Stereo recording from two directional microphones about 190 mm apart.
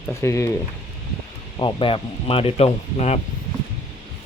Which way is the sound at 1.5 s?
25° left (ahead or behind).